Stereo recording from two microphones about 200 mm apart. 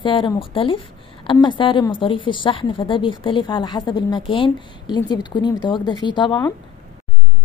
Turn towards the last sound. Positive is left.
turn(degrees=20)  # may be behind; listen again after turning